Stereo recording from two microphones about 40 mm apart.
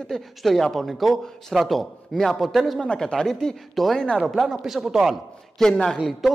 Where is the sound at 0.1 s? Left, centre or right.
Centre.